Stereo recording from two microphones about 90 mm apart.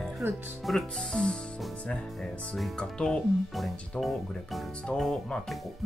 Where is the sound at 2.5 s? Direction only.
5° left (ahead or behind).